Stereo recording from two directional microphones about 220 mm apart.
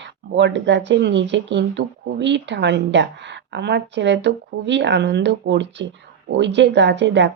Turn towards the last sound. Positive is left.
turn(degrees=-55)  # may be behind; listen again after turning